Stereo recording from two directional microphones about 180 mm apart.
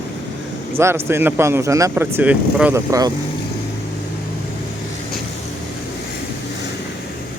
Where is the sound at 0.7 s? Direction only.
15° right (ahead or behind).